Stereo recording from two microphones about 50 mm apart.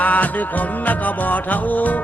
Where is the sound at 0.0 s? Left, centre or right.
Left.